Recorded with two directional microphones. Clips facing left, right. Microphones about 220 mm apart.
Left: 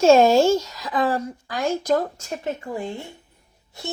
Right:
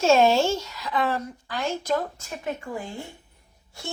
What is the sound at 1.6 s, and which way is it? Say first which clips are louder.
Speech: left 5 dB; 15° left (ahead or behind).